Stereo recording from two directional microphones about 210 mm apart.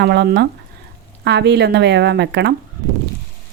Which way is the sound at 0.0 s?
55° right (ahead or behind).